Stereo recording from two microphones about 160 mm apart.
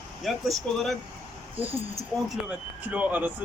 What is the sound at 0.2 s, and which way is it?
Speech, centre (ahead or behind).